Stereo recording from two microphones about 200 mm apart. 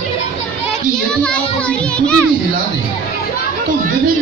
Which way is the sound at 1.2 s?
5° left (ahead or behind).